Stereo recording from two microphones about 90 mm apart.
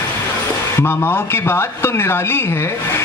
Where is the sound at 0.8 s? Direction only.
25° left (ahead or behind).